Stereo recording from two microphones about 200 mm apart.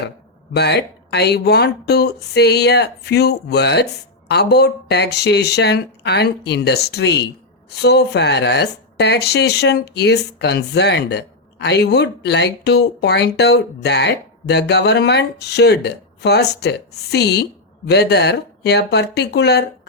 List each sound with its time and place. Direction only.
0.5 s speech: 55° left (ahead or behind)